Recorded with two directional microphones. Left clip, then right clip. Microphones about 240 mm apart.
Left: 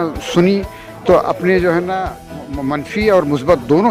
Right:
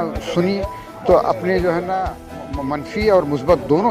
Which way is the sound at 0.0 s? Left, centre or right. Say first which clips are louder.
Left 5 dB; left.